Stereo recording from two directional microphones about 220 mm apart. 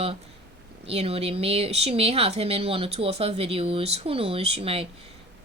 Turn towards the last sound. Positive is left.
turn(degrees=-25)  # may be behind; listen again after turning